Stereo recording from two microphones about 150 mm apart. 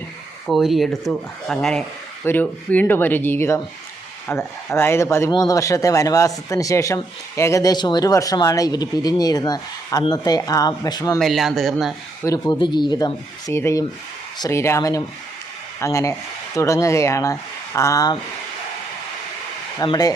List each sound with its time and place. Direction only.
0.4 s speech: centre (ahead or behind); by 11.2 s 25° left (ahead or behind)
11.2 s speech: centre (ahead or behind)
12.2 s speech: 25° left (ahead or behind)
13.6 s speech: 15° left (ahead or behind)
19.8 s speech: 25° left (ahead or behind)